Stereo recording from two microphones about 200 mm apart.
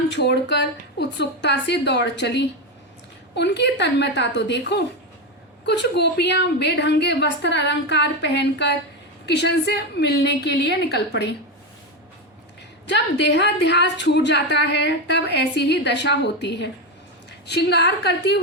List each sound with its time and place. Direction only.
0.1 s a woman's voice: 60° left (ahead or behind)
12.9 s a woman's voice: 60° left (ahead or behind)